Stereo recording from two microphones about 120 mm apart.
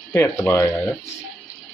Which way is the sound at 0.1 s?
20° left (ahead or behind).